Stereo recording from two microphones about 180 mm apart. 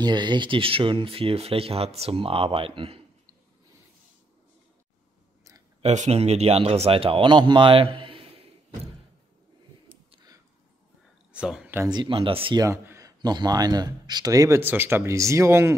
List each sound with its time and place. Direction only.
0.0 s speech: 25° right (ahead or behind)
5.8 s speech: 40° right (ahead or behind)
10.1 s a sound: 20° right (ahead or behind)
11.3 s speech: 5° right (ahead or behind)
11.9 s speech: 25° right (ahead or behind)
12.6 s a man's voice: 15° right (ahead or behind)